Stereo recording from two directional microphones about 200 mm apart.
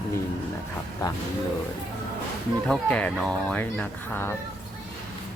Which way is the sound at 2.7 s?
5° left (ahead or behind).